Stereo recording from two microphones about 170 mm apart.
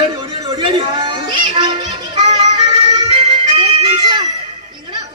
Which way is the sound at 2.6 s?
25° right (ahead or behind).